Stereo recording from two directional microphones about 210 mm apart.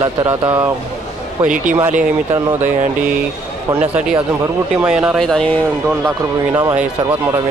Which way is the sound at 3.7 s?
5° right (ahead or behind).